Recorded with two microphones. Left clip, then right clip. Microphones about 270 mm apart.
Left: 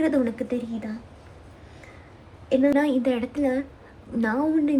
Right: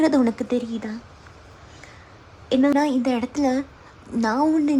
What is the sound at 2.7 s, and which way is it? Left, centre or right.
A woman's voice, centre.